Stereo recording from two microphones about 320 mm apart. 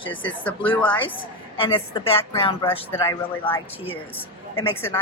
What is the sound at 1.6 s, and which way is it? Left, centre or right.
Speech, centre.